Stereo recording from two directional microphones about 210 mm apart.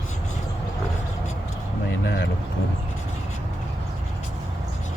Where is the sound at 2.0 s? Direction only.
55° left (ahead or behind).